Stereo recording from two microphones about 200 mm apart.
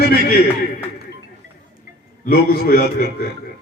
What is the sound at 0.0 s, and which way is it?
Speech, 50° left (ahead or behind).